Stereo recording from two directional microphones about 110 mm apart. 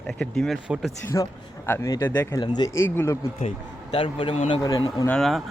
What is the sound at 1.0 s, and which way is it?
Speech, 25° left (ahead or behind).